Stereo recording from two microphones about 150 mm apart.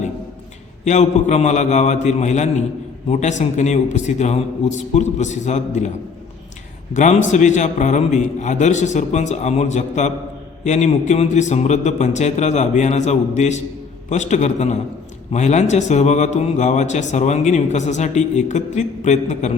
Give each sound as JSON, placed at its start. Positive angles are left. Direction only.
{"t": 0.9, "sound": "speech", "side_deg": 50}
{"t": 6.9, "sound": "speech", "side_deg": 55}